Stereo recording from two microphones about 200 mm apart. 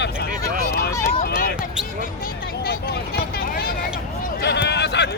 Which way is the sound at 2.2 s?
50° left (ahead or behind).